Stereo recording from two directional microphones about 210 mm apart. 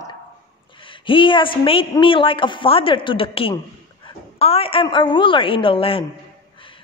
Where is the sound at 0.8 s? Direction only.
25° left (ahead or behind).